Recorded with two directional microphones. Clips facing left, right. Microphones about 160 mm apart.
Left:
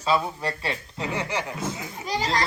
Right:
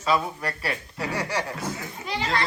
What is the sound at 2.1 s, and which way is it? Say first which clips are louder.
Speech: left 1 dB; 40° left (ahead or behind).